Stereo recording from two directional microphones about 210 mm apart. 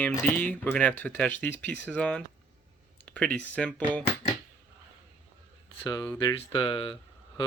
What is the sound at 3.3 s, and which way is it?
Speech, 5° left (ahead or behind).